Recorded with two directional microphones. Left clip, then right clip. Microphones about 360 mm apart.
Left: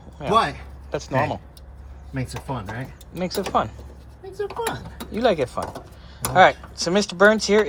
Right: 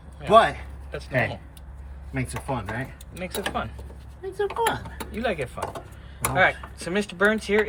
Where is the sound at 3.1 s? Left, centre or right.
Centre.